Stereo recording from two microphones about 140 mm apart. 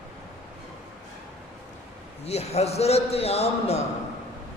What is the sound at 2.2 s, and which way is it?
A man's voice, 50° left (ahead or behind).